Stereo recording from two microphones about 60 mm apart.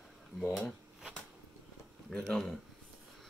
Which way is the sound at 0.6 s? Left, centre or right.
Centre.